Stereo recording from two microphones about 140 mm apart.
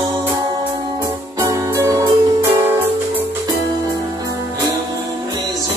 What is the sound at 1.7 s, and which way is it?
Music, 20° right (ahead or behind).